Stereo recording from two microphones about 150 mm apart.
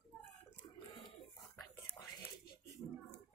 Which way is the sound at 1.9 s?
15° left (ahead or behind).